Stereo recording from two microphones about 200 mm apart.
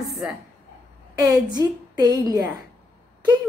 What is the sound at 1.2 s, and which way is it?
A woman's voice, 20° right (ahead or behind).